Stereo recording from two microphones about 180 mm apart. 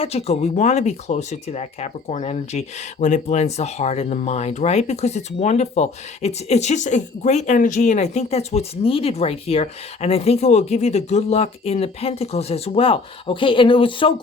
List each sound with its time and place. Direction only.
0.0 s speech: 35° left (ahead or behind)